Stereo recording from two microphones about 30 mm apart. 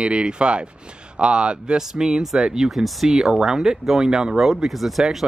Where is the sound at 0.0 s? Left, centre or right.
Right.